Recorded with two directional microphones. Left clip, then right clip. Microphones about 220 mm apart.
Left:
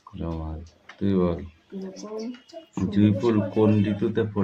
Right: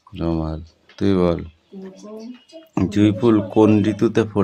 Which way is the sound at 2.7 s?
50° right (ahead or behind).